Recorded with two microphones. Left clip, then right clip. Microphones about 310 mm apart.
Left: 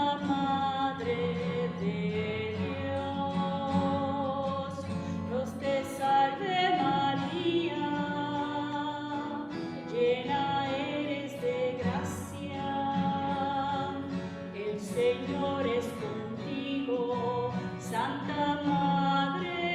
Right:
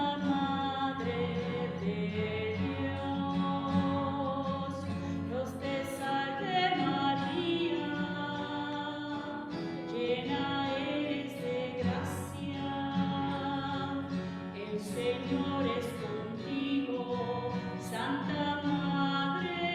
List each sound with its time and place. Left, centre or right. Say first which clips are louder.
0.0 s music: left 3 dB; left
3.3 s music: left 2 dB; left
10.0 s music: left 6 dB; centre
14.9 s music: left 5 dB; centre
17.9 s music: left 3 dB; centre